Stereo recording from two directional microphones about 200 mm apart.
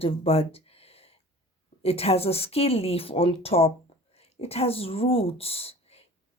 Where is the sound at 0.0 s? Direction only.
30° left (ahead or behind).